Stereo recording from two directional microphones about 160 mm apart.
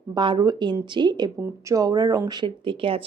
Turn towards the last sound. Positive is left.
turn(degrees=-35)  # may be behind; listen again after turning